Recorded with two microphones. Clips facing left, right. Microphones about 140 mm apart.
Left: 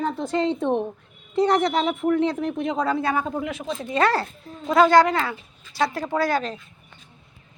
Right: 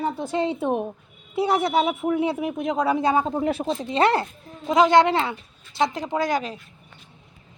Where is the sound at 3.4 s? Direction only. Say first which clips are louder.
Right 5 dB; 35° right (ahead or behind).